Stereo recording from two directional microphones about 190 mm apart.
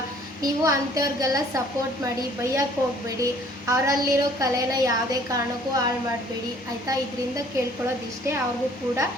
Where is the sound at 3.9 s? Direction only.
20° right (ahead or behind).